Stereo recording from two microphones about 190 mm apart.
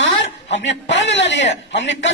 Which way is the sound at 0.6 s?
70° left (ahead or behind).